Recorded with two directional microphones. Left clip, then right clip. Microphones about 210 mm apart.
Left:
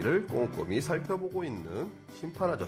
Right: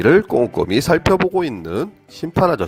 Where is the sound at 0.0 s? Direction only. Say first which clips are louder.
Right 15 dB; 45° right (ahead or behind).